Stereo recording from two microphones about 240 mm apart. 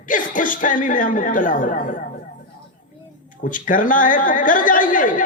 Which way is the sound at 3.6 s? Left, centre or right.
Left.